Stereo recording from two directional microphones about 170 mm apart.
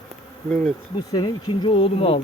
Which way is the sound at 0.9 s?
25° left (ahead or behind).